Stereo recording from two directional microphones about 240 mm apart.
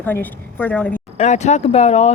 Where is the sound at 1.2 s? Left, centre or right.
Left.